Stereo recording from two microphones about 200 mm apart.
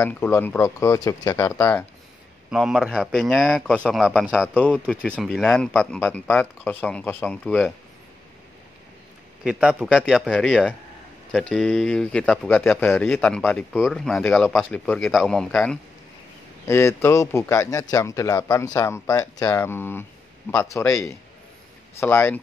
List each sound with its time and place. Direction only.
0.0 s speech: 10° left (ahead or behind)
2.5 s speech: 5° right (ahead or behind)
9.4 s speech: 5° right (ahead or behind)